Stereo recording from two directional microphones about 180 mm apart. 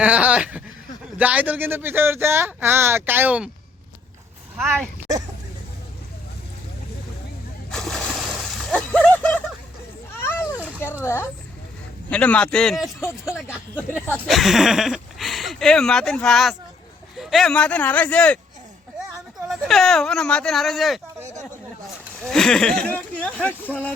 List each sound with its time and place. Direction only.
0.0 s speech: 5° right (ahead or behind)
7.7 s splash: centre (ahead or behind)
11.0 s speech: 15° left (ahead or behind)
13.0 s speech: 15° left (ahead or behind)
13.5 s speech: 5° right (ahead or behind)
19.5 s speech: centre (ahead or behind)
21.2 s speech: 15° right (ahead or behind)
22.2 s speech: 5° left (ahead or behind)